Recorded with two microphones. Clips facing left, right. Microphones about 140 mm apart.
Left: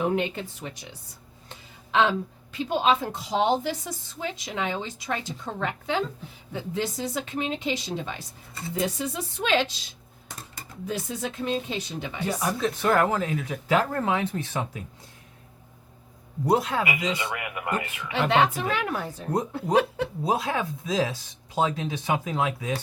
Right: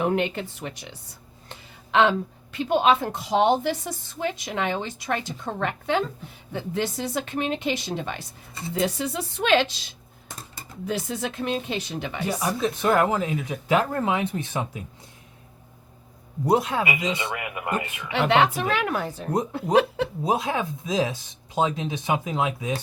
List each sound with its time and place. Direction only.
0.0 s a woman's voice: 70° right (ahead or behind)
8.7 s speech: 75° right (ahead or behind)
12.2 s speech: 10° right (ahead or behind)
16.5 s speech: 20° right (ahead or behind)
18.1 s a woman's voice: 80° right
20.2 s speech: 20° right (ahead or behind)